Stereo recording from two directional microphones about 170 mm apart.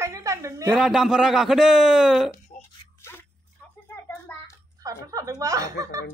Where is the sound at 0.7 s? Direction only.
Centre (ahead or behind).